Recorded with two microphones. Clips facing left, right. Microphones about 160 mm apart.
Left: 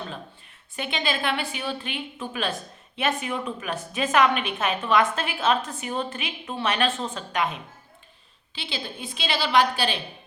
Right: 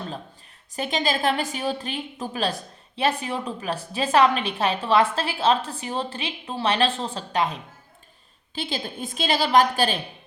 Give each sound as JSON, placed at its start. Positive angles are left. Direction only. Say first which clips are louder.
{"t": 0.8, "sound": "a woman's voice", "louder": "right 3 dB", "side_deg": -40}
{"t": 8.5, "sound": "a woman's voice", "louder": "right 4 dB", "side_deg": -45}